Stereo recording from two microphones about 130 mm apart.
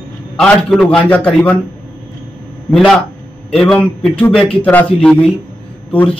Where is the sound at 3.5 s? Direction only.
5° left (ahead or behind).